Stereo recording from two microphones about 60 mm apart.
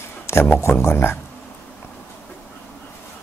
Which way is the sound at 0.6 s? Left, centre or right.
Left.